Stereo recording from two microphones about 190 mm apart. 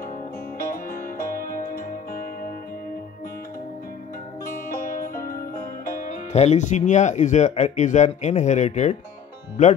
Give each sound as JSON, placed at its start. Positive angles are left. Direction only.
{"t": 0.6, "sound": "music", "side_deg": 50}
{"t": 4.5, "sound": "music", "side_deg": 45}